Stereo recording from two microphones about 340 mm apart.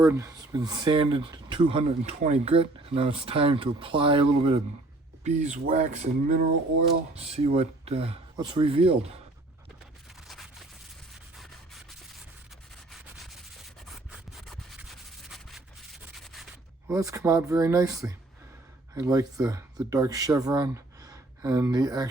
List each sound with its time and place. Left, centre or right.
0.0 s speech: centre
14.3 s scratch: centre
16.2 s sanding: centre
16.9 s speech: centre